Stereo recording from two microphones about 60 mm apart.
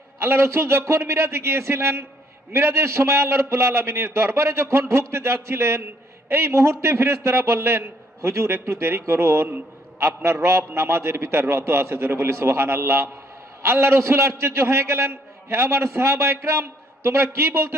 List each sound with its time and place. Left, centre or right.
0.2 s a man's voice: right